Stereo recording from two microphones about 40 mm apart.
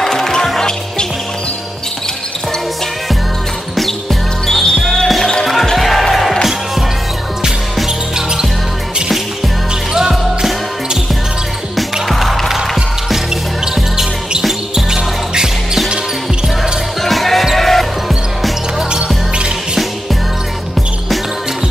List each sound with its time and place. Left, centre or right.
0.0 s music: centre
3.7 s music: centre
9.9 s music: centre
11.7 s music: centre
14.9 s music: centre
17.0 s basketball bounce: centre
17.6 s music: centre
18.8 s music: centre